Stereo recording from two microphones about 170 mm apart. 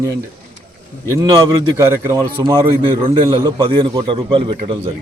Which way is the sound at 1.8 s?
15° right (ahead or behind).